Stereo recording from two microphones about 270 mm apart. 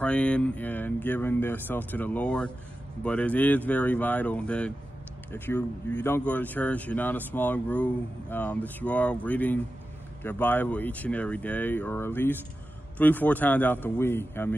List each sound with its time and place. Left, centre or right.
0.0 s speech: centre